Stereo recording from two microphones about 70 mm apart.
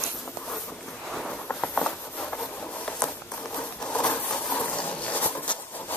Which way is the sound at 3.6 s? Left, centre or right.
Left.